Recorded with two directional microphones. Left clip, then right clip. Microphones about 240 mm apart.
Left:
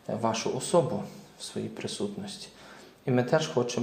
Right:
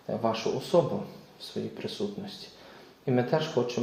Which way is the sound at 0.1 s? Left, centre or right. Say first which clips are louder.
Even; left.